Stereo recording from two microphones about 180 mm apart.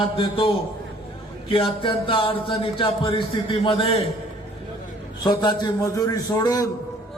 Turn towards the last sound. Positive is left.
turn(degrees=20)  # may be behind; listen again after turning